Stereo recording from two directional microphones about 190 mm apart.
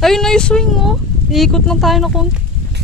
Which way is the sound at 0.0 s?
Centre (ahead or behind).